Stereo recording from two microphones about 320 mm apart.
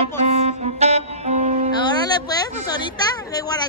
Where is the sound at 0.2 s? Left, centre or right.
Centre.